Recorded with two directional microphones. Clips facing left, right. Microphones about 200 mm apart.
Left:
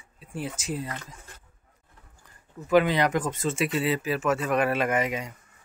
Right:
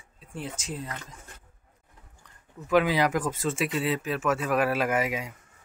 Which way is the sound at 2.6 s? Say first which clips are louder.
Left 2 dB; centre (ahead or behind).